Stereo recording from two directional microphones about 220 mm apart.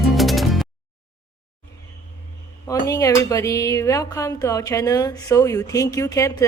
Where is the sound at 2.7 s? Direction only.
15° left (ahead or behind).